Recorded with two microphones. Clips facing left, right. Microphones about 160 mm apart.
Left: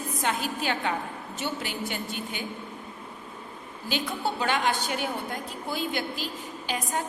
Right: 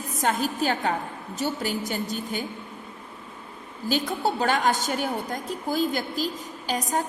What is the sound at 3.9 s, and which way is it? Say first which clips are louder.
A woman's voice: right 4 dB; 40° right (ahead or behind).